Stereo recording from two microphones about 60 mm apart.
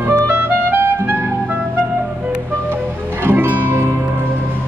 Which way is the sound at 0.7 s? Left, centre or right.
Right.